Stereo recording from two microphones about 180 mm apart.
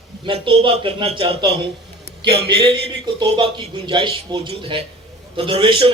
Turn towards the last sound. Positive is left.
turn(degrees=-30)  # may be behind; listen again after turning